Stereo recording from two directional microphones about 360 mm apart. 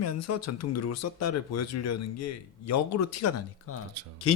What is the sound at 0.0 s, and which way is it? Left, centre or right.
Speech, left.